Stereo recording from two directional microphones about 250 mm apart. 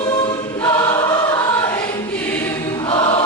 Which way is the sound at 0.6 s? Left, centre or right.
Centre.